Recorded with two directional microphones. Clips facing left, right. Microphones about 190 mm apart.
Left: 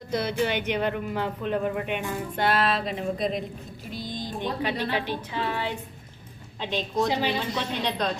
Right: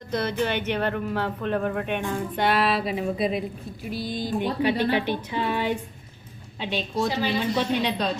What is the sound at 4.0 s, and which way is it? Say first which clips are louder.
Speech: right 4 dB; 20° left (ahead or behind).